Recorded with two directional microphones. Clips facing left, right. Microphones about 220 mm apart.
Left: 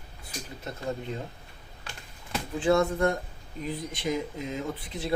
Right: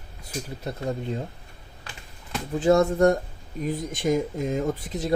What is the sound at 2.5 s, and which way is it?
Speech, 40° right (ahead or behind).